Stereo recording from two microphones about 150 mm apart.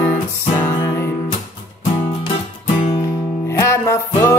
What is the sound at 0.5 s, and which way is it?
Music, 20° left (ahead or behind).